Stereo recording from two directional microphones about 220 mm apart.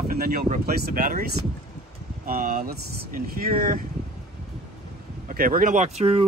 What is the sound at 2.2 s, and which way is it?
Speech, 40° right (ahead or behind).